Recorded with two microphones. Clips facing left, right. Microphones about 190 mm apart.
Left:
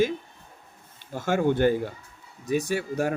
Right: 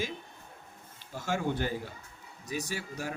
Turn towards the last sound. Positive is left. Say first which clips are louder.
# left 11 dB
turn(degrees=60)  # may be behind; listen again after turning